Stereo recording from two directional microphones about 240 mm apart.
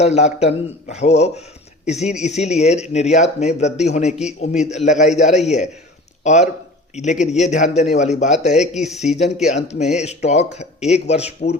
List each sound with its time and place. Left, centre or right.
0.0 s speech: left
4.1 s a man's voice: centre
4.4 s speech: left